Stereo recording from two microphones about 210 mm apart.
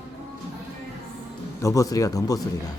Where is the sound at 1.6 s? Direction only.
15° left (ahead or behind).